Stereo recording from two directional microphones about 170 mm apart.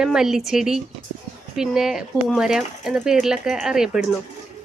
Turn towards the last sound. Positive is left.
turn(degrees=-5)  # may be behind; listen again after turning